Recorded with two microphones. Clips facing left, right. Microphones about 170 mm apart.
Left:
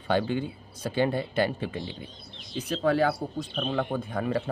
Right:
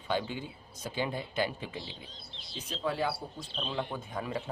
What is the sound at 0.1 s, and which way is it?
Speech, 60° left (ahead or behind).